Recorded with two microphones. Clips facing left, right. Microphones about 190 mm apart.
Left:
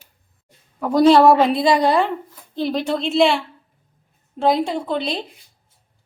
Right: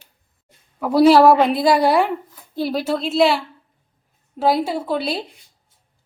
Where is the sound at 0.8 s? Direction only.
5° right (ahead or behind).